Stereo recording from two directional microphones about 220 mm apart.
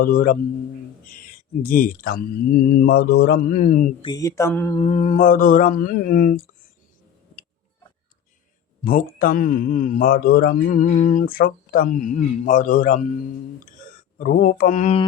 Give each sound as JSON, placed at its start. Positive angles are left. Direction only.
{"t": 0.0, "sound": "speech", "side_deg": 40}
{"t": 1.6, "sound": "speech", "side_deg": 40}
{"t": 4.0, "sound": "mantra", "side_deg": 15}
{"t": 4.8, "sound": "speech", "side_deg": 35}
{"t": 8.8, "sound": "speech", "side_deg": 40}
{"t": 14.2, "sound": "speech", "side_deg": 40}